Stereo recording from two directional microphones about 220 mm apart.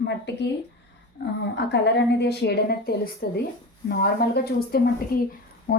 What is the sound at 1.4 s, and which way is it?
A woman's voice, 55° left (ahead or behind).